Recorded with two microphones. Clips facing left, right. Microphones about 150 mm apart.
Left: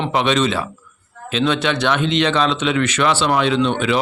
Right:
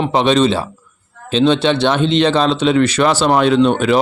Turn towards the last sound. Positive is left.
turn(degrees=-45)  # may be behind; listen again after turning